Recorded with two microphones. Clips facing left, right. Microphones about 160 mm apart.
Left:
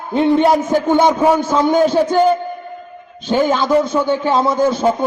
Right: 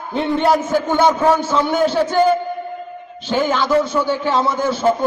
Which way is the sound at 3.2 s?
15° left (ahead or behind).